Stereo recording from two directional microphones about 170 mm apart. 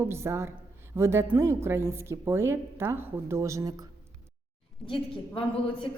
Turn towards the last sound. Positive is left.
turn(degrees=30)  # may be behind; listen again after turning